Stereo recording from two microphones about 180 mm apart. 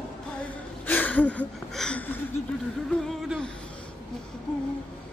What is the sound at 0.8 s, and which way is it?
Speech, 10° left (ahead or behind).